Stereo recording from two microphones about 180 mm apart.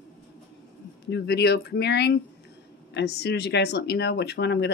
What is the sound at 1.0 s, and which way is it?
Speech, 65° left (ahead or behind).